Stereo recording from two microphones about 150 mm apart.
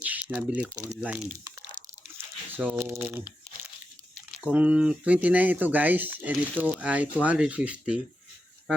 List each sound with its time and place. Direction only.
0.0 s a sound: 10° right (ahead or behind)
1.0 s speech: 10° right (ahead or behind)
1.5 s crunch: 30° right (ahead or behind)
2.6 s speech: 15° right (ahead or behind)
4.4 s speech: 10° right (ahead or behind)